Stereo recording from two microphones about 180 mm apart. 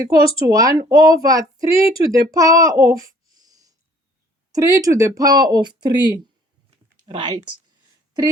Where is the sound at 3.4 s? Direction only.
20° right (ahead or behind).